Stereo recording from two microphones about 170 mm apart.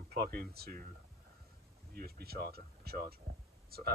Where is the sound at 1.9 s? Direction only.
65° right (ahead or behind).